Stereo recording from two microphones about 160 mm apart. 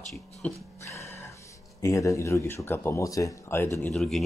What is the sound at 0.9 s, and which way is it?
Music, 20° left (ahead or behind).